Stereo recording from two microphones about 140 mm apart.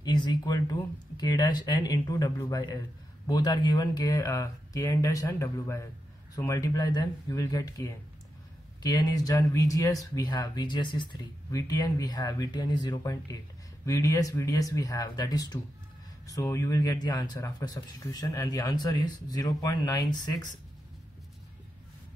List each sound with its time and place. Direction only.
0.0 s speech: 30° left (ahead or behind)